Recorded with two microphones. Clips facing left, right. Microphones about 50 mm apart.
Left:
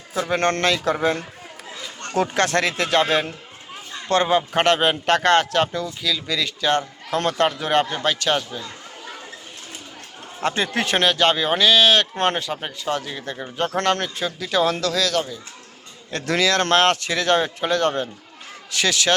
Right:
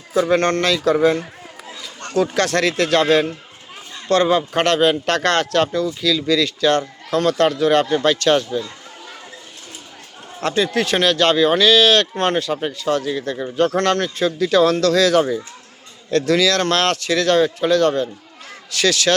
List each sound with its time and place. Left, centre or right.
0.1 s speech: centre
0.5 s speech: left
2.1 s speech: left
2.6 s speech: centre
8.0 s speech: centre
10.5 s speech: left
11.0 s speech: centre
12.1 s speech: left
12.5 s speech: centre
13.7 s speech: left
14.3 s speech: centre
14.9 s speech: centre
16.1 s speech: left